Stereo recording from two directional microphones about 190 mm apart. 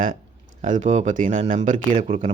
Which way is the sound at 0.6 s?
40° right (ahead or behind).